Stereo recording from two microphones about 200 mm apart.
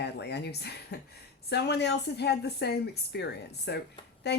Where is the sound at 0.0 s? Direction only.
55° left (ahead or behind).